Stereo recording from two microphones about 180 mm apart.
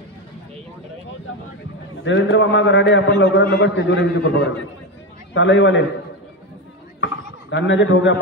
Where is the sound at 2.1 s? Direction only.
90° left.